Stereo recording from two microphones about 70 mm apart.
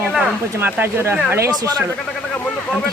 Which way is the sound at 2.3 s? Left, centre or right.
Centre.